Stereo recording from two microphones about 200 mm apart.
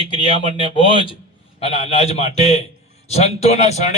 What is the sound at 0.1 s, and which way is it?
A man's voice, 25° left (ahead or behind).